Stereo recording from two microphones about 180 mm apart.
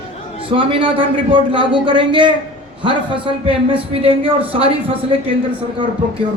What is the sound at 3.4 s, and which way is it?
Speech, 30° right (ahead or behind).